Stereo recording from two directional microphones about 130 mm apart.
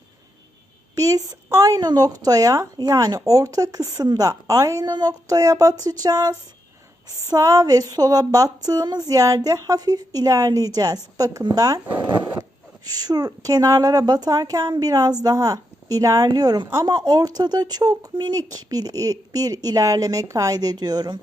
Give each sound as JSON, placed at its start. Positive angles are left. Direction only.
{"t": 0.9, "sound": "a woman's voice", "side_deg": -25}